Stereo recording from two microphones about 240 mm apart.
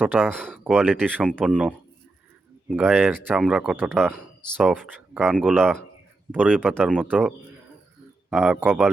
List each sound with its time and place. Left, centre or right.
0.0 s speech: centre